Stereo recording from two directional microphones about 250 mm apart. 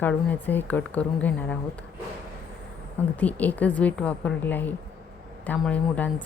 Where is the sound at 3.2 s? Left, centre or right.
Centre.